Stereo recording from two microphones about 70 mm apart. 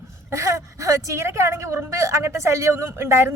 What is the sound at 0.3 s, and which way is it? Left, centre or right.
A woman's voice, right.